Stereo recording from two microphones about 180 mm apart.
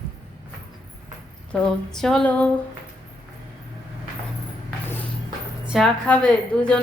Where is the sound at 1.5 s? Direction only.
Centre (ahead or behind).